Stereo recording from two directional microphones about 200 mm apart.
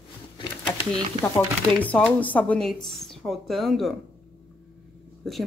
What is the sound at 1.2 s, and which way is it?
Speech, 10° left (ahead or behind).